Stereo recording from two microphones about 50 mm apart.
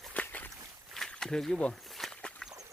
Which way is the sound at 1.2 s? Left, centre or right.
Centre.